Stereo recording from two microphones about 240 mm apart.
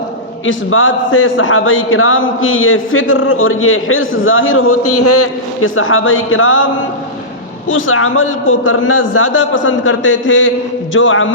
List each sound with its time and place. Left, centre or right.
0.4 s a man's voice: left
7.7 s a man's voice: left